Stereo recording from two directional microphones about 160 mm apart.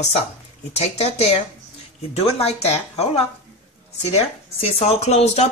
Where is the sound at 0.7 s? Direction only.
40° left (ahead or behind).